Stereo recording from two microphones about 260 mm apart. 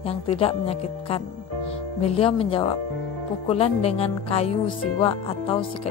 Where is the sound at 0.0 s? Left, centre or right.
Left.